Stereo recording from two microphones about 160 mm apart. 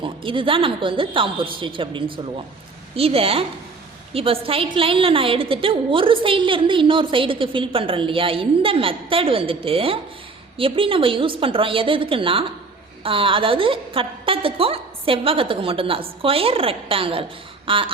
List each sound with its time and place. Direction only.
0.0 s a woman's voice: 35° right (ahead or behind)